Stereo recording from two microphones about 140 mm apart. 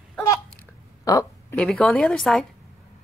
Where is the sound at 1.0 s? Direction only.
25° left (ahead or behind).